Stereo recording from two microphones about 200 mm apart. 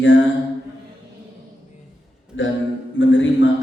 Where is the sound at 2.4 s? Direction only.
70° left (ahead or behind).